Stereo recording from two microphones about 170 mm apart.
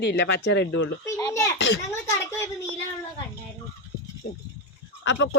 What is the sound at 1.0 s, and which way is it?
A child's voice, 20° left (ahead or behind).